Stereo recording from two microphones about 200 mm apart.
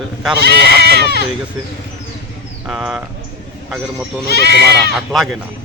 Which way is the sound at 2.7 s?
5° right (ahead or behind).